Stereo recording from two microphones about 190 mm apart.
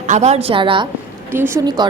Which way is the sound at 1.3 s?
15° right (ahead or behind).